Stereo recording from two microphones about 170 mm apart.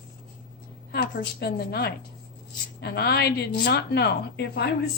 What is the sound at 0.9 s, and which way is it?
A woman's voice, 65° left (ahead or behind).